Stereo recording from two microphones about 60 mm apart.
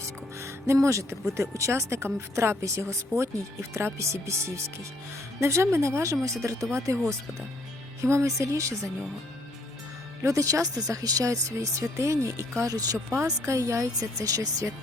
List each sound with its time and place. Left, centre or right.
0.0 s music: right
1.3 s speech: right
8.0 s speech: right
10.2 s speech: right
12.6 s speech: right
13.2 s speech: right